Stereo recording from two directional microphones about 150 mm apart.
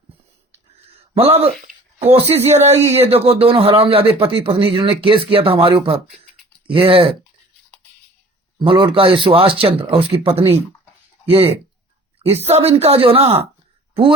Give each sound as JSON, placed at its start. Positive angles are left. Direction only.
{"t": 0.5, "sound": "a sound", "side_deg": -40}
{"t": 1.6, "sound": "speech", "side_deg": -45}
{"t": 8.5, "sound": "speech", "side_deg": -35}